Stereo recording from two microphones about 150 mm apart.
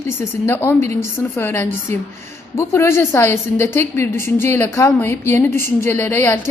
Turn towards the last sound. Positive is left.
turn(degrees=15)  # may be behind; listen again after turning